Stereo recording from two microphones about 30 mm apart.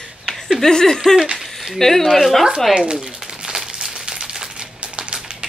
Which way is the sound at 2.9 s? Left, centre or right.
Centre.